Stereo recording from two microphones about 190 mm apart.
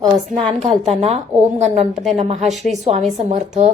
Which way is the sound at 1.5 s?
35° right (ahead or behind).